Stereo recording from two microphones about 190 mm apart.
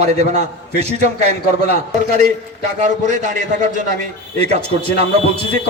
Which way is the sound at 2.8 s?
40° right (ahead or behind).